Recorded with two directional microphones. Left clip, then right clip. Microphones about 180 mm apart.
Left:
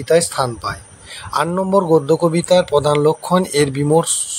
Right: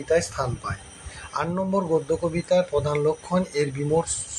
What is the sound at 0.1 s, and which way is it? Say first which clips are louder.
A man's voice: left 8 dB; 50° left (ahead or behind).